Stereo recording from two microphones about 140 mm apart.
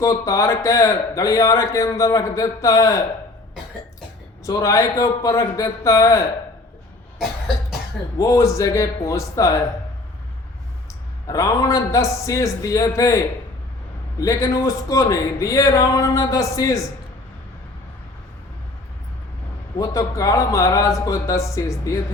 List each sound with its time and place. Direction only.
0.0 s a man's voice: 25° left (ahead or behind)
4.4 s a man's voice: 25° left (ahead or behind)
8.2 s a man's voice: 25° left (ahead or behind)
11.3 s a man's voice: 25° left (ahead or behind)
19.8 s a man's voice: 25° left (ahead or behind)